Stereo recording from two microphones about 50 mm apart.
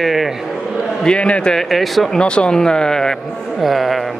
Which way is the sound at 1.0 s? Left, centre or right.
Centre.